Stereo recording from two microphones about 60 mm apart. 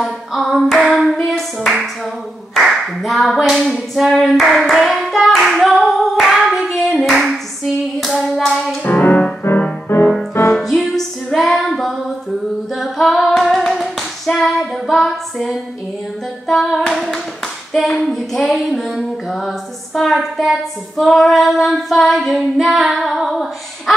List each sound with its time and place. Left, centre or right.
0.3 s clapping: centre
8.8 s music: left
9.9 s music: left
10.6 s music: centre
11.3 s female singing: centre
12.7 s singing: centre
18.0 s child singing: centre
18.5 s music: centre
19.3 s a sound: centre
21.0 s child singing: centre
22.9 s female singing: centre